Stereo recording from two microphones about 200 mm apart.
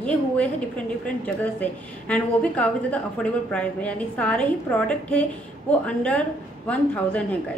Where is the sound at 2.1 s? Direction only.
5° left (ahead or behind).